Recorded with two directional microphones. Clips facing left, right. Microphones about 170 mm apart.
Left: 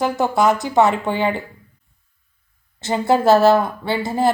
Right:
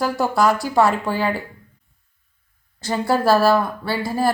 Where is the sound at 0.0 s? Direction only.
20° left (ahead or behind).